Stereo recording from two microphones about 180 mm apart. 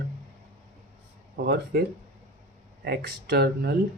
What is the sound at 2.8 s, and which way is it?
Speech, 60° right (ahead or behind).